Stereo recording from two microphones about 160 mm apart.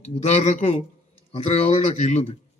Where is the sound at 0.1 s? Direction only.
40° left (ahead or behind).